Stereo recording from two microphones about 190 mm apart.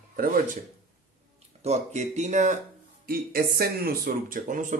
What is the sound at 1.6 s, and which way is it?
Speech, 35° right (ahead or behind).